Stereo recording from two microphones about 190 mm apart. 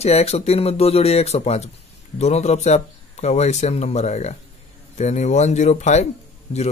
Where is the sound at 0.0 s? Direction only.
35° left (ahead or behind).